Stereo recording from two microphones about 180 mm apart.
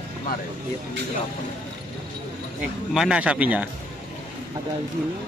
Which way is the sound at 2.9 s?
5° right (ahead or behind).